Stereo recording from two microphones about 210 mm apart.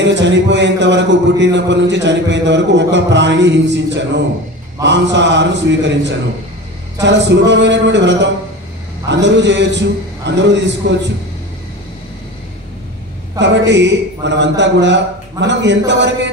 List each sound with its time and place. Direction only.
0.0 s a man's voice: 55° right (ahead or behind)
13.4 s a man's voice: 55° right (ahead or behind)